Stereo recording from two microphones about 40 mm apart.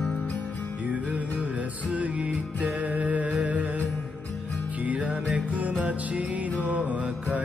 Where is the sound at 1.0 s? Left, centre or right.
Right.